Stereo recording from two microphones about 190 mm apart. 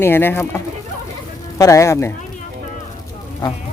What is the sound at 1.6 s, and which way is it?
Speech, 15° left (ahead or behind).